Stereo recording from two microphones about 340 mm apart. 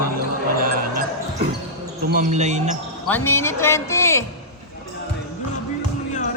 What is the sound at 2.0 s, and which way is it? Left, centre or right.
Speech, right.